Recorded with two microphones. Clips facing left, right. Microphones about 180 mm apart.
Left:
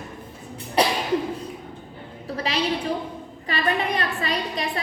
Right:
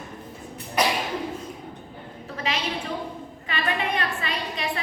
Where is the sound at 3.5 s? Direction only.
35° left (ahead or behind).